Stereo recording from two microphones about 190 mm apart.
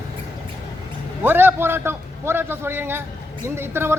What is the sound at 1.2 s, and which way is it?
Speech, 10° right (ahead or behind).